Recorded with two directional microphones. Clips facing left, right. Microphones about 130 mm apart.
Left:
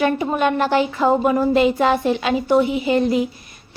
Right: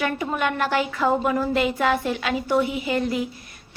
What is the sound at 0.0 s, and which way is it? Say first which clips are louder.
A woman's voice: left 6 dB; 25° left (ahead or behind).